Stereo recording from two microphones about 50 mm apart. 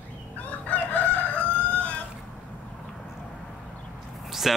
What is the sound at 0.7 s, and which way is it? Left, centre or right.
Chicken, left.